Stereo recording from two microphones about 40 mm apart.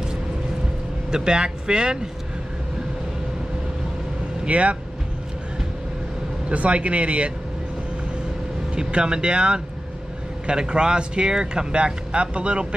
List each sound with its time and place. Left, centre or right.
1.1 s speech: right
4.5 s speech: right
6.5 s speech: right
8.7 s speech: right